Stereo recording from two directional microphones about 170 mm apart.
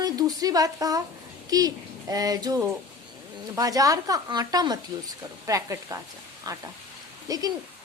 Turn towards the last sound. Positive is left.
turn(degrees=-20)  # may be behind; listen again after turning